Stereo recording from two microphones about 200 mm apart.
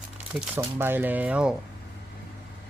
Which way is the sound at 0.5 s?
10° right (ahead or behind).